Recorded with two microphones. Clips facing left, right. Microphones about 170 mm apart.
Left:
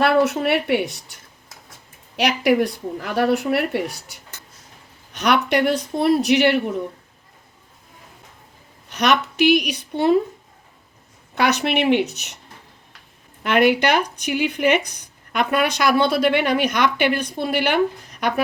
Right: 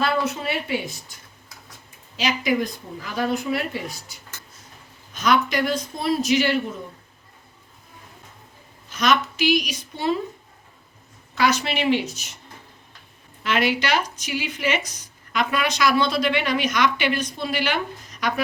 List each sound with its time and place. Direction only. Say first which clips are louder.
0.0 s speech: left 6 dB; 65° left (ahead or behind)
8.9 s speech: left 2 dB; 65° left (ahead or behind)
11.3 s speech: left 3 dB; 65° left (ahead or behind)
13.4 s speech: left 6 dB; 55° left (ahead or behind)